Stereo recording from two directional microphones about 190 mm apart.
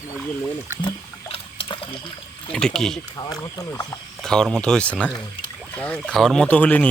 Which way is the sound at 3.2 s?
20° left (ahead or behind).